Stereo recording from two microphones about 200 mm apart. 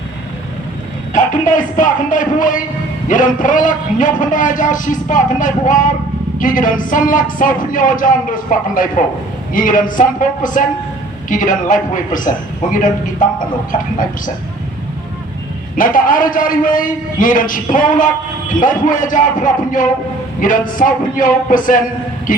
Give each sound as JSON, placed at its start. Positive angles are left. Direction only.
{"t": 1.1, "sound": "a man's voice", "side_deg": 40}
{"t": 15.7, "sound": "a man's voice", "side_deg": 45}